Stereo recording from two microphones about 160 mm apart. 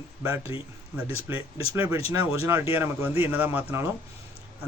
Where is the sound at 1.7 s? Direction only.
15° right (ahead or behind).